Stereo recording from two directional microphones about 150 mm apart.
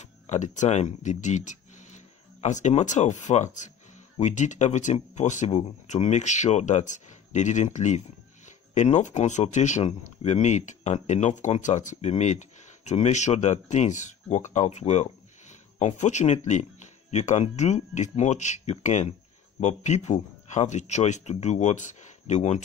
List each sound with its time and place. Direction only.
0.0 s speech: 50° left (ahead or behind)